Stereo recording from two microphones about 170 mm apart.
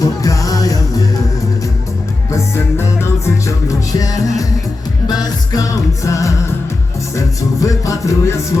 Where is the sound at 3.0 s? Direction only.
20° left (ahead or behind).